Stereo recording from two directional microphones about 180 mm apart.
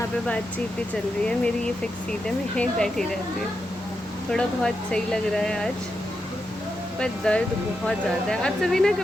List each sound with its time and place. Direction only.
2.2 s speech: 5° left (ahead or behind)
4.3 s speech: 5° left (ahead or behind)
7.0 s speech: 5° left (ahead or behind)